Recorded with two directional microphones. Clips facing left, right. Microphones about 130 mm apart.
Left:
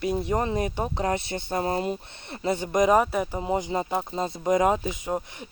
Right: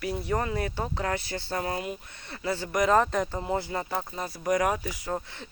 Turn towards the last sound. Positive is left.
turn(degrees=15)  # may be behind; listen again after turning